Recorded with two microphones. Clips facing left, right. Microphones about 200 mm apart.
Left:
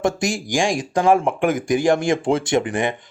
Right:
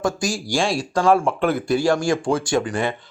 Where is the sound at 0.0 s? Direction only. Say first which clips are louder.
Left 2 dB; 25° left (ahead or behind).